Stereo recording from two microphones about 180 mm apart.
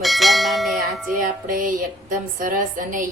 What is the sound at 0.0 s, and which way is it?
Bell, centre (ahead or behind).